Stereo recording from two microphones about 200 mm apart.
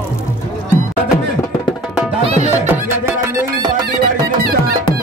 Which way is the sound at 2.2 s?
35° right (ahead or behind).